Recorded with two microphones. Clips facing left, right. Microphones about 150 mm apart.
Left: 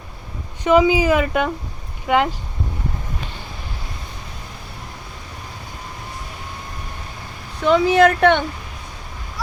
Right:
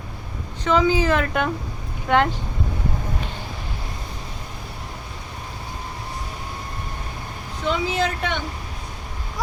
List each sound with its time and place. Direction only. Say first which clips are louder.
0.6 s speech: left 4 dB; 10° left (ahead or behind)
7.6 s speech: left 9 dB; 60° left (ahead or behind)